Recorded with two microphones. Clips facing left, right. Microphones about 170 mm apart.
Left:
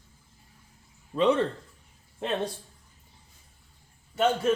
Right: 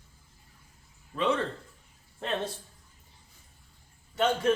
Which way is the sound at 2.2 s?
15° left (ahead or behind).